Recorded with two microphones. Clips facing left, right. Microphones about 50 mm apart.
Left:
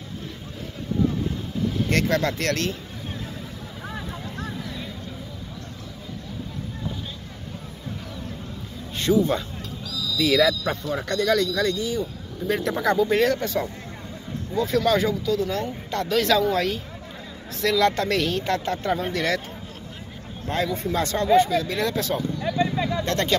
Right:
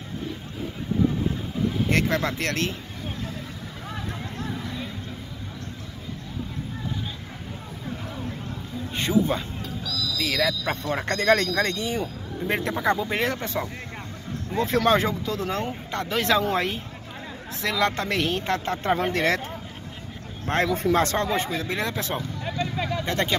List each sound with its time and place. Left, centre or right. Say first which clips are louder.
1.9 s speech: left 3 dB; centre
4.6 s vehicle: right 1 dB; centre
8.9 s speech: left 2 dB; right
10.1 s speech: left 6 dB; centre
10.8 s speech: left 1 dB; right
14.5 s speech: even; right
15.9 s speech: left 2 dB; right
20.4 s speech: right 3 dB; right
22.8 s vehicle: left 2 dB; right